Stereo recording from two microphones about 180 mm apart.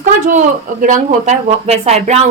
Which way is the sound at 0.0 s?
45° right (ahead or behind).